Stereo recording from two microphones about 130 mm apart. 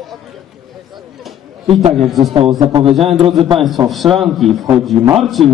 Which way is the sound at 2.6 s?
45° right (ahead or behind).